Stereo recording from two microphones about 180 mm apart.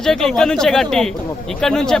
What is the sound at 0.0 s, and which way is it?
Speech, centre (ahead or behind).